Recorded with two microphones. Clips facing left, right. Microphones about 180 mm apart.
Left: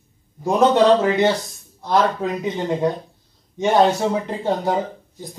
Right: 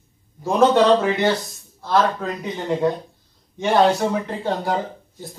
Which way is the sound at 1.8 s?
15° left (ahead or behind).